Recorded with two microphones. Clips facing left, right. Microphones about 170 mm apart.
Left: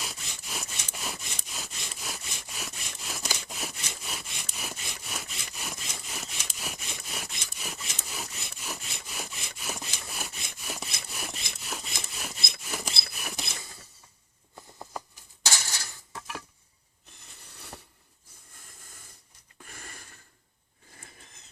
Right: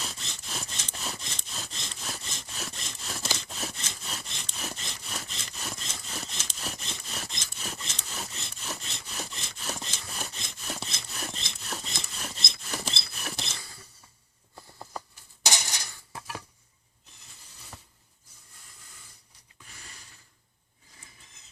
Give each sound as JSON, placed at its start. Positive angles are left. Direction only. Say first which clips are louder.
{"t": 0.0, "sound": "sawing", "louder": "right 1 dB", "side_deg": 10}
{"t": 15.4, "sound": "dishes", "louder": "right 2 dB", "side_deg": -15}
{"t": 19.5, "sound": "a sound", "louder": "left 5 dB", "side_deg": 50}